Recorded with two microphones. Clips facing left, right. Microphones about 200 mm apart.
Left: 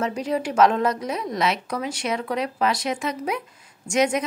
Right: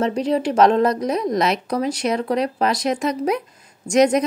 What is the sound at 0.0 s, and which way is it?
A woman's voice, 35° right (ahead or behind).